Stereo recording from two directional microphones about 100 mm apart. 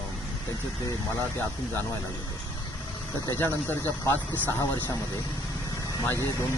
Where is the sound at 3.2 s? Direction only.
20° left (ahead or behind).